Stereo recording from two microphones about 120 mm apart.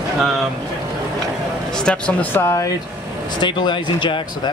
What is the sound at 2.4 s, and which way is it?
Speech, 25° left (ahead or behind).